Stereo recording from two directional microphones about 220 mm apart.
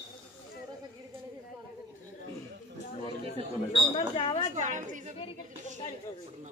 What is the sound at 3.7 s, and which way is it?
Speech, 25° left (ahead or behind).